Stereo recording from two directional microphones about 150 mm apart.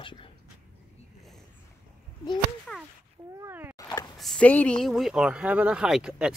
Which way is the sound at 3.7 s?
25° left (ahead or behind).